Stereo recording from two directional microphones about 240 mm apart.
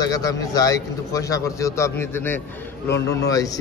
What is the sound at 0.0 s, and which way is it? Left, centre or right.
A man's voice, centre.